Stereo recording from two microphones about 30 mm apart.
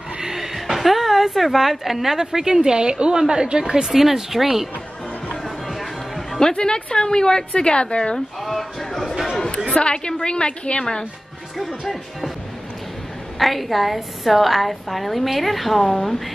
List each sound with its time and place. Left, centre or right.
0.2 s a sound: centre; by 3.2 s right
3.2 s speech: right
3.9 s speech: centre
5.4 s a sound: centre
6.5 s a woman's voice: left
8.4 s a woman's voice: centre
9.8 s a woman's voice: left
13.4 s a woman's voice: centre